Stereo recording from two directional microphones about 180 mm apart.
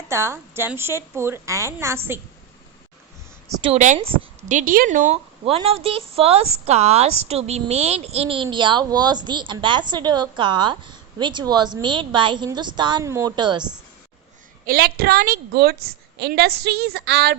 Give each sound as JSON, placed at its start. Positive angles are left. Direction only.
{"t": 0.1, "sound": "a woman's voice", "side_deg": -15}
{"t": 3.6, "sound": "a woman's voice", "side_deg": -40}
{"t": 4.0, "sound": "a woman's voice", "side_deg": -30}
{"t": 4.4, "sound": "a woman's voice", "side_deg": -45}
{"t": 14.6, "sound": "a woman's voice", "side_deg": -55}